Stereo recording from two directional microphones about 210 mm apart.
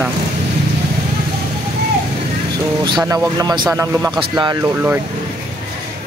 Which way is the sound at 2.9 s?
20° right (ahead or behind).